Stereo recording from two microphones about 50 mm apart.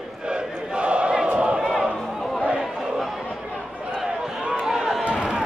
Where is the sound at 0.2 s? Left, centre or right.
Centre.